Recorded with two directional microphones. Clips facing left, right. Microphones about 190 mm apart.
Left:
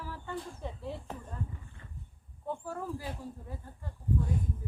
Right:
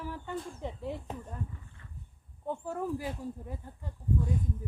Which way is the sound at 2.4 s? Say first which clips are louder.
Right 3 dB; 15° right (ahead or behind).